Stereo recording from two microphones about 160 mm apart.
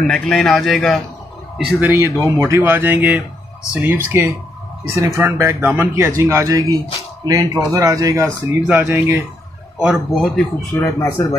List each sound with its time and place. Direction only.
0.0 s speech: centre (ahead or behind)
1.8 s speech: 15° right (ahead or behind)
9.8 s speech: 5° right (ahead or behind)
10.2 s speech: 5° left (ahead or behind)